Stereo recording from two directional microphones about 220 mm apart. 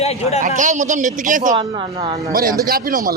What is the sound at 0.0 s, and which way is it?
Speech, 30° left (ahead or behind).